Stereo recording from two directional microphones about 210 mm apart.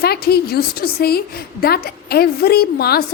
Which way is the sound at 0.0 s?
50° left (ahead or behind).